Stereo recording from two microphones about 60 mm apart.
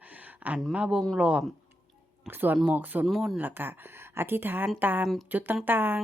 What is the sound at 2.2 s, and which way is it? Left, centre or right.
Speech, right.